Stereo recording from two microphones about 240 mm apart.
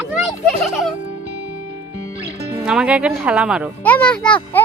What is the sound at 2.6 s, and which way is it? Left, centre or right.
A child's voice, centre.